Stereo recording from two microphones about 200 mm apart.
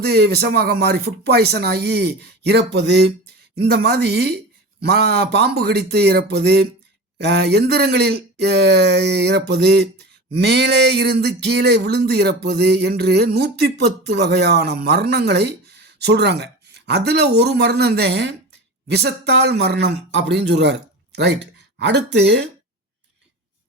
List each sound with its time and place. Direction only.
0.0 s a man's voice: 55° right (ahead or behind)